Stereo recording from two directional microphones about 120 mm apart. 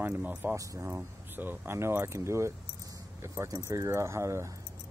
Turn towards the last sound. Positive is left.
turn(degrees=-25)  # may be behind; listen again after turning